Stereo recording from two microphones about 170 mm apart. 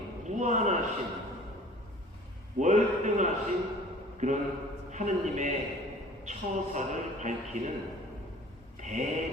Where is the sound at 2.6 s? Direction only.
45° right (ahead or behind).